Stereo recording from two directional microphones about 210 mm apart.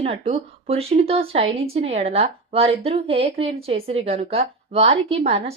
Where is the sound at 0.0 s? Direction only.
30° right (ahead or behind).